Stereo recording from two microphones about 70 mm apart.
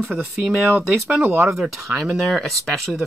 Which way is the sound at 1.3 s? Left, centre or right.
Right.